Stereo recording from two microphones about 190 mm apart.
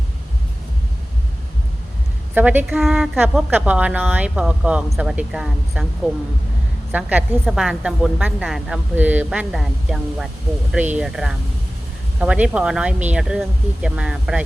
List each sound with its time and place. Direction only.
2.3 s a woman's voice: 10° right (ahead or behind)